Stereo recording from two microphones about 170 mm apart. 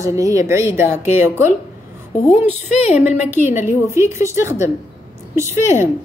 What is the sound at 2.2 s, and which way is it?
Speech, 40° left (ahead or behind).